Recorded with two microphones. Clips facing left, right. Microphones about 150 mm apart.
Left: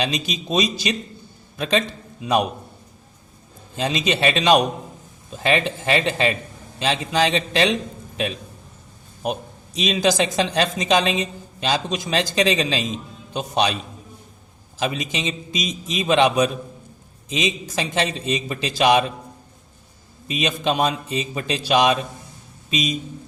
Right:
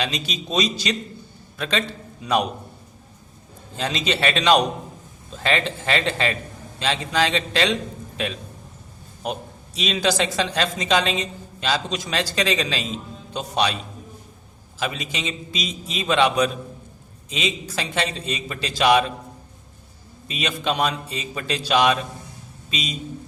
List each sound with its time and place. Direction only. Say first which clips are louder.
0.0 s a man's voice: left 3 dB; 15° left (ahead or behind)
3.8 s speech: left 2 dB; 15° left (ahead or behind)
9.2 s speech: left 3 dB; 15° left (ahead or behind)
14.8 s speech: left 3 dB; 20° left (ahead or behind)
20.2 s speech: left 3 dB; 15° left (ahead or behind)